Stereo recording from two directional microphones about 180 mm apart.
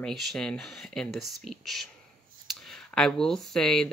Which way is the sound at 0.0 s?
Centre (ahead or behind).